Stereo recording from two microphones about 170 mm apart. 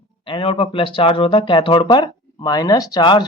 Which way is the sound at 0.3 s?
30° left (ahead or behind).